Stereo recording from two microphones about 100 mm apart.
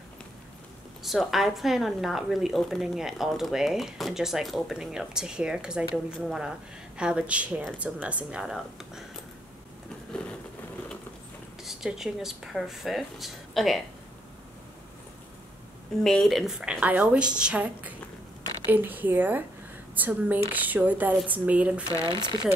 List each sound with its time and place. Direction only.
1.0 s a woman's voice: centre (ahead or behind)
11.6 s a woman's voice: 5° right (ahead or behind)
16.0 s a woman's voice: 5° left (ahead or behind); by 21.8 s 15° right (ahead or behind)
22.0 s speech: 50° right (ahead or behind)